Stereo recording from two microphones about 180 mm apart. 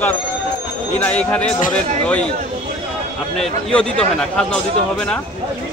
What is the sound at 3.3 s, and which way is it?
A man's voice, 5° left (ahead or behind).